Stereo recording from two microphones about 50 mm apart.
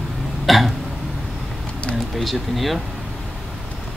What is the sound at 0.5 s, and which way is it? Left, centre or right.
Speech, centre.